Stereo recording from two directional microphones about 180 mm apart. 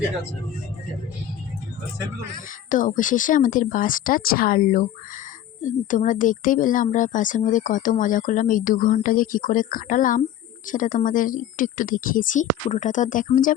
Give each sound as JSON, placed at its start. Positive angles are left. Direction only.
{"t": 2.6, "sound": "a woman's voice", "side_deg": 45}